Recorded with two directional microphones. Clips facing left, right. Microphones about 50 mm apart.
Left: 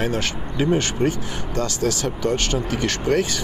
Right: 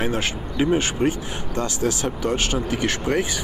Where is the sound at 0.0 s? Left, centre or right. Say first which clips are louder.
Even; centre.